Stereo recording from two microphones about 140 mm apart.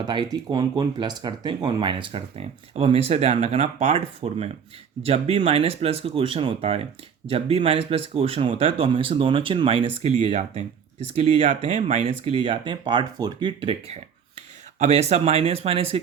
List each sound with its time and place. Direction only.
0.0 s speech: 30° right (ahead or behind); by 12.1 s 55° right (ahead or behind)
12.2 s speech: 35° right (ahead or behind)